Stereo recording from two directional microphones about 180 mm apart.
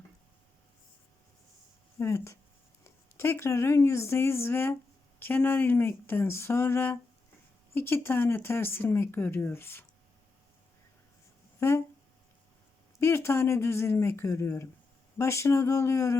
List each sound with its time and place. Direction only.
2.0 s speech: 15° left (ahead or behind)
11.6 s speech: 15° left (ahead or behind)
13.0 s speech: 15° left (ahead or behind)